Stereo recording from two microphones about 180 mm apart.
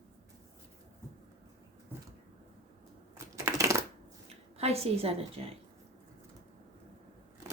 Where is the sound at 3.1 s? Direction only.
15° right (ahead or behind).